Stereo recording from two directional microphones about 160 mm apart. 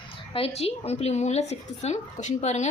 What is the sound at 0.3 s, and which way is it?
A woman's voice, 40° left (ahead or behind).